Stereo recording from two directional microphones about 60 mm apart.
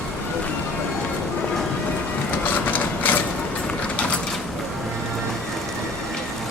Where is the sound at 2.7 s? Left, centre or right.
Left.